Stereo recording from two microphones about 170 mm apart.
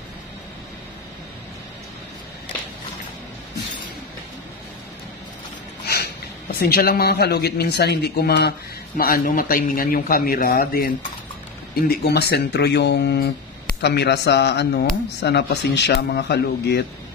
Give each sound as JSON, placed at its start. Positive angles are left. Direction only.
{"t": 6.6, "sound": "speech", "side_deg": 60}
{"t": 11.9, "sound": "speech", "side_deg": 75}